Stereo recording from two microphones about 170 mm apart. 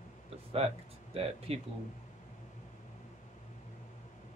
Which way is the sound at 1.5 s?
35° right (ahead or behind).